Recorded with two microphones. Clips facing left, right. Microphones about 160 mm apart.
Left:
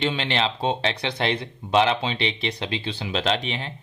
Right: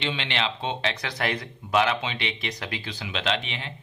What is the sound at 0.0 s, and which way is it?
Speech, 40° left (ahead or behind).